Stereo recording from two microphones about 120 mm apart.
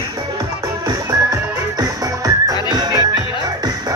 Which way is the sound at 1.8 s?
30° right (ahead or behind).